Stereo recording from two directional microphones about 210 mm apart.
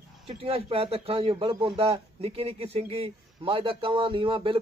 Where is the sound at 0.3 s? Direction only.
25° right (ahead or behind).